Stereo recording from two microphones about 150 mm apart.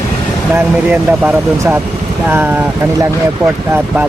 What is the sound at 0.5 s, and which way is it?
Speech, 15° right (ahead or behind).